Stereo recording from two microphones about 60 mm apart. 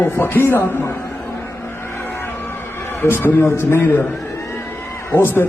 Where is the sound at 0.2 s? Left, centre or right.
Left.